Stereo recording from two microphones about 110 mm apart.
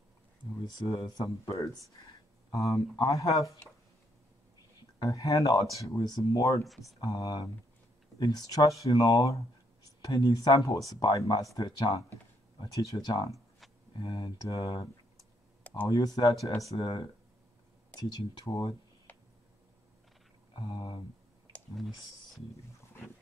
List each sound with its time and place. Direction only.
0.8 s speech: 30° left (ahead or behind)
4.9 s speech: 30° left (ahead or behind)
13.9 s speech: 45° left (ahead or behind)
14.5 s speech: 35° left (ahead or behind)
15.9 s speech: 35° left (ahead or behind)
16.7 s speech: 50° left (ahead or behind)
17.9 s speech: 40° left (ahead or behind)
19.1 s a sound: 15° left (ahead or behind)
20.5 s speech: 50° left (ahead or behind)
21.7 s speech: centre (ahead or behind)